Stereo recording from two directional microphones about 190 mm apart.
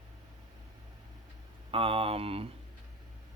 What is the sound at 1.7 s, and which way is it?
Speech, 30° right (ahead or behind).